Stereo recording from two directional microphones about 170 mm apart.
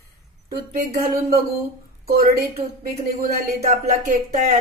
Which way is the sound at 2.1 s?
65° right (ahead or behind).